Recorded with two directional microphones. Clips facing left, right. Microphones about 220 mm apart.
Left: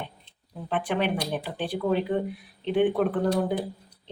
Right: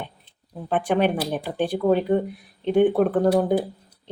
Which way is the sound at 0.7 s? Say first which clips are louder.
Right 5 dB; 45° right (ahead or behind).